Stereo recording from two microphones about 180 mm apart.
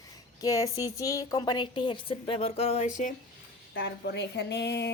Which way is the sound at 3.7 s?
70° left (ahead or behind).